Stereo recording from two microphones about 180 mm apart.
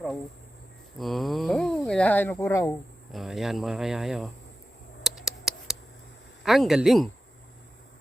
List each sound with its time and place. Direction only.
0.9 s speech: centre (ahead or behind)
3.1 s speech: centre (ahead or behind)
5.0 s a sound: centre (ahead or behind)
6.4 s speech: centre (ahead or behind)